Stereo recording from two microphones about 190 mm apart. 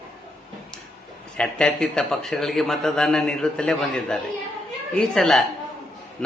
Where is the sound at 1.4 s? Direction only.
5° left (ahead or behind).